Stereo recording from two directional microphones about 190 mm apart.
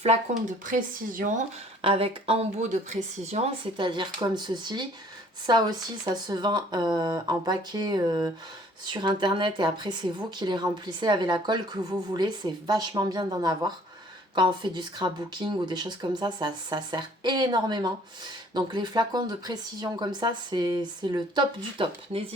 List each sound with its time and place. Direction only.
0.0 s speech: 35° right (ahead or behind)
1.8 s speech: 30° right (ahead or behind)